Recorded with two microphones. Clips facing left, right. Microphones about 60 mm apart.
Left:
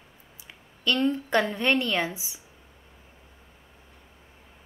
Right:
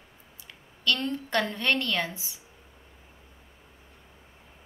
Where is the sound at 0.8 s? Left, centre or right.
Centre.